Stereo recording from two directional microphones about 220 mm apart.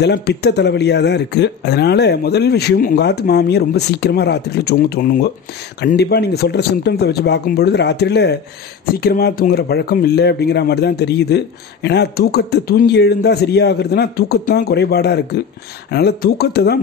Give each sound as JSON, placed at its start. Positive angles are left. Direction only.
{"t": 0.0, "sound": "speech", "side_deg": 50}